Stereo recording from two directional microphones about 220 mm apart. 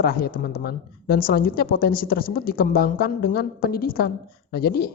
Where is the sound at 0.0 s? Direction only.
45° left (ahead or behind).